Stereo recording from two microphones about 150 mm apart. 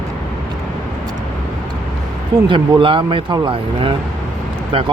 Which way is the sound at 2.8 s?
35° right (ahead or behind).